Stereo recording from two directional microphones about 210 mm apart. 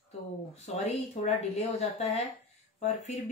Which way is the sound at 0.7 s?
30° left (ahead or behind).